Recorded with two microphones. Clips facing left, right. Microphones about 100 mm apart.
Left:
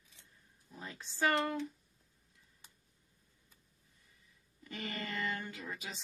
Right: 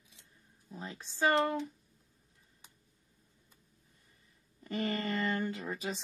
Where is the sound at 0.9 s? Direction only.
20° right (ahead or behind).